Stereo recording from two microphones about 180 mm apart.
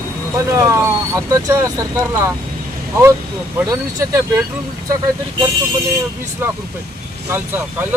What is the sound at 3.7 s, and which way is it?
Speech, 15° right (ahead or behind).